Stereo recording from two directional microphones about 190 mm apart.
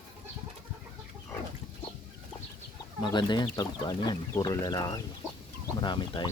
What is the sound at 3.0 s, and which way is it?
Speech, 25° left (ahead or behind).